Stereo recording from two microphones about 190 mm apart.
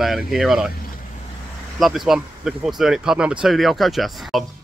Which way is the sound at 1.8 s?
Centre (ahead or behind).